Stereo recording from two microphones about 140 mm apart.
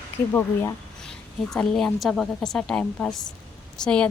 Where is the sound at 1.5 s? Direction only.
5° left (ahead or behind).